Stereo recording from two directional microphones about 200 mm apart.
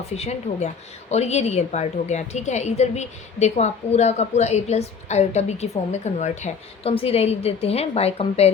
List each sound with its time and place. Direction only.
0.1 s a woman's voice: 30° left (ahead or behind)